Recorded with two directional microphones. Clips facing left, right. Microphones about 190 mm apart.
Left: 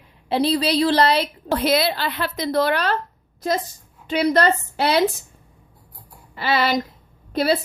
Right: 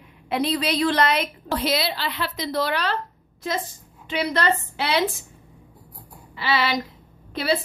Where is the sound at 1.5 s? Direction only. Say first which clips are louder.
Left 5 dB; 55° left (ahead or behind).